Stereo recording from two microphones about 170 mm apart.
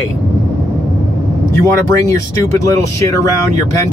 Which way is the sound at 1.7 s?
15° left (ahead or behind).